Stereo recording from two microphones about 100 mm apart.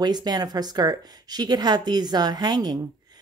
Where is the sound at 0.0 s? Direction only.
45° right (ahead or behind).